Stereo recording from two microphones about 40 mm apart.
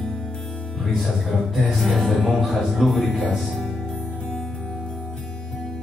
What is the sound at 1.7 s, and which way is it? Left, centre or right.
Music, centre.